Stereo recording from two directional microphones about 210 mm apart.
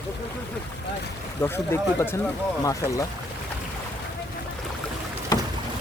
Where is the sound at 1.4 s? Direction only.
10° left (ahead or behind).